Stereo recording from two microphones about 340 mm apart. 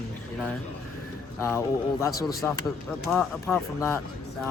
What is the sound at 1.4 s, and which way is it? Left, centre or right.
Speech, centre.